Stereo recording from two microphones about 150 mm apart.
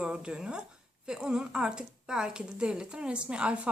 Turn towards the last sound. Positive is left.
turn(degrees=-10)  # may be behind; listen again after turning